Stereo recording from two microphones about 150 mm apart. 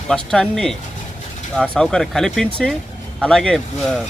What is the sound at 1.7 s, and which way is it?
Speech, 5° left (ahead or behind).